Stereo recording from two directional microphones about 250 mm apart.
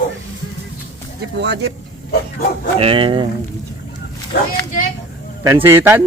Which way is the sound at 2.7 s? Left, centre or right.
Right.